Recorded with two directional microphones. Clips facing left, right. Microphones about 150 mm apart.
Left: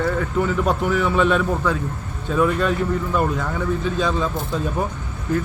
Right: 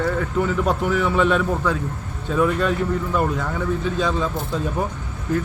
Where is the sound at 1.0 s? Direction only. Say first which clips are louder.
Even; 10° right (ahead or behind).